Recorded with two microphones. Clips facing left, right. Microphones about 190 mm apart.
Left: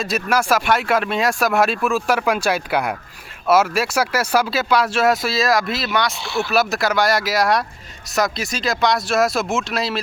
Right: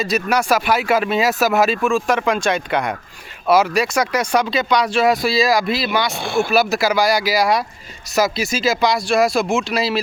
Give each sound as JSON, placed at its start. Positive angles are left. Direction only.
{"t": 0.0, "sound": "speech", "side_deg": 0}
{"t": 6.1, "sound": "speech", "side_deg": -50}
{"t": 6.5, "sound": "speech", "side_deg": 0}